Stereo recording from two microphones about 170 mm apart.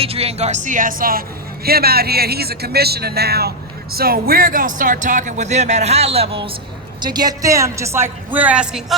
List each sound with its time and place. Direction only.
0.0 s a woman's voice: 35° right (ahead or behind); by 9.0 s 5° right (ahead or behind)